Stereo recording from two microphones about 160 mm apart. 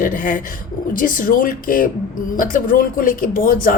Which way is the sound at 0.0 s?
55° left (ahead or behind).